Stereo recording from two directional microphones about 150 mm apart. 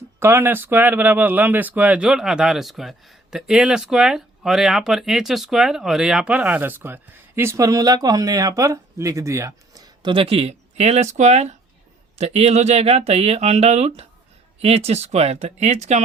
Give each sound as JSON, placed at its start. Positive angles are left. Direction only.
{"t": 0.2, "sound": "speech", "side_deg": -15}